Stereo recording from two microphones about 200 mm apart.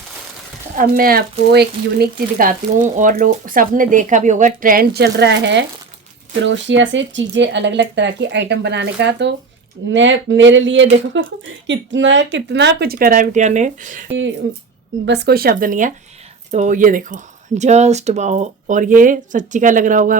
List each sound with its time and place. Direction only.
0.8 s speech: 45° right (ahead or behind)
15.0 s speech: 60° right (ahead or behind); by 20.1 s 40° right (ahead or behind)